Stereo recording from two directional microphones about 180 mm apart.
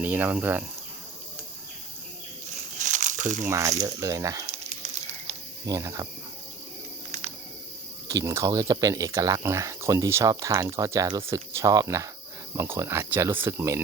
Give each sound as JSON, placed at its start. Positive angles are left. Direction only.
{"t": 0.0, "sound": "speech", "side_deg": -10}
{"t": 2.7, "sound": "a sound", "side_deg": -45}
{"t": 3.4, "sound": "speech", "side_deg": -15}
{"t": 5.6, "sound": "speech", "side_deg": -15}
{"t": 7.1, "sound": "cricket", "side_deg": -40}
{"t": 8.0, "sound": "speech", "side_deg": -15}